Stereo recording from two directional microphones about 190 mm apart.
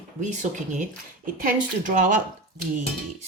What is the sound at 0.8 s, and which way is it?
Speech, 45° right (ahead or behind).